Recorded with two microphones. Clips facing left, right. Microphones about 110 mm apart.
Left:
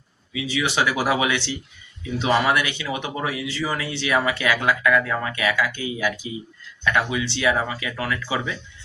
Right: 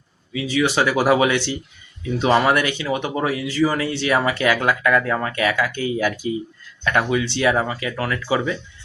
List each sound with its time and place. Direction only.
0.3 s speech: 45° right (ahead or behind)